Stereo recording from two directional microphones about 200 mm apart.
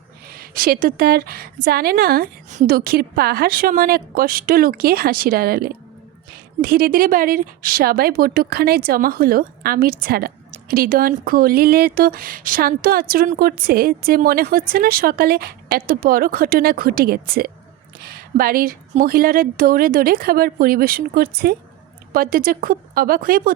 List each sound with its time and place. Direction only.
0.3 s speech: 45° right (ahead or behind)